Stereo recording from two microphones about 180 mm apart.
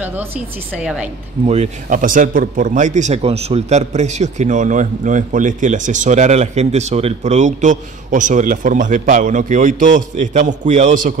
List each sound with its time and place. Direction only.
0.7 s a woman's voice: 5° right (ahead or behind)
1.4 s a man's voice: 40° right (ahead or behind)